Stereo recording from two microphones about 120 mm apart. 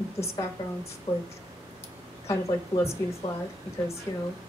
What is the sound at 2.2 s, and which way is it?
Music, 25° left (ahead or behind).